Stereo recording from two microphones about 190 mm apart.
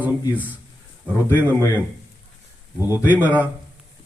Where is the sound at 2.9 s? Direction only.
10° right (ahead or behind).